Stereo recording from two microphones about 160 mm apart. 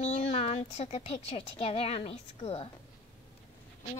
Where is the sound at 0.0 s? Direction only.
45° left (ahead or behind).